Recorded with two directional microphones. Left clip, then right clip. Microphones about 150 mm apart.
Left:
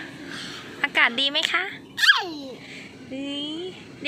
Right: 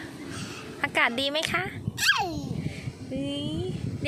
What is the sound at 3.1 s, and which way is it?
Speech, 20° right (ahead or behind).